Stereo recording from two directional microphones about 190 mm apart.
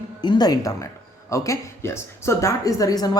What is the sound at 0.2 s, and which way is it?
Speech, 20° left (ahead or behind).